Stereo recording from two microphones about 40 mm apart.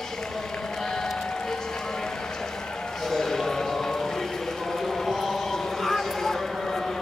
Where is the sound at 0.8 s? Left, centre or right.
Centre.